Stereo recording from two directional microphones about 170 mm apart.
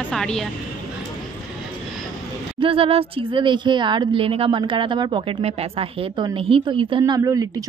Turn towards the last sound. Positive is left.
turn(degrees=-20)  # may be behind; listen again after turning